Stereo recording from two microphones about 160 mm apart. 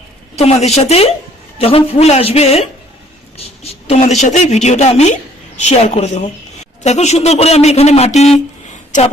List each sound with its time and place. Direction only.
0.3 s a man's voice: 40° left (ahead or behind)